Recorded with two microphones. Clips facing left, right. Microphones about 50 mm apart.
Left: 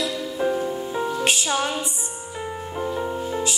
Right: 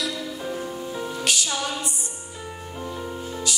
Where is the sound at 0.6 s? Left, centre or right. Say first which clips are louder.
Left 5 dB; centre.